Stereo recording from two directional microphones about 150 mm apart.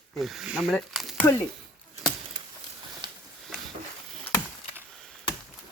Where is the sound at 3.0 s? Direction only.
30° right (ahead or behind).